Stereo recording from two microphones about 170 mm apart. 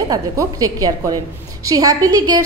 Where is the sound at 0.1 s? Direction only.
20° right (ahead or behind).